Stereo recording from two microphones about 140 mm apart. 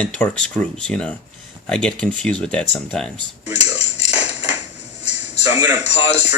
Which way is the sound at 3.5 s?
50° left (ahead or behind).